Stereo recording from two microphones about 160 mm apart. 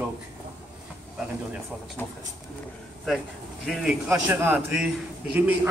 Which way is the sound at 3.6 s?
5° right (ahead or behind).